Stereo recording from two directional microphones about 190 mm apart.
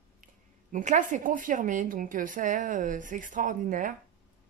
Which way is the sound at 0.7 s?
40° right (ahead or behind).